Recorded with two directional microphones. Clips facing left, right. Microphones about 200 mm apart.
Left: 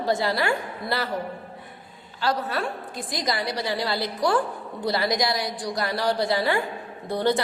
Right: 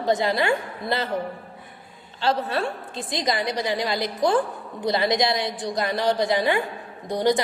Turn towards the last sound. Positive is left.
turn(degrees=-15)  # may be behind; listen again after turning